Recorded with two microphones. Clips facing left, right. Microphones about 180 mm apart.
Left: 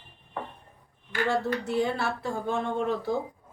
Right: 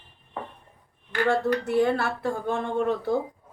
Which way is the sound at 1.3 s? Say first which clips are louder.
Right 4 dB; 60° right (ahead or behind).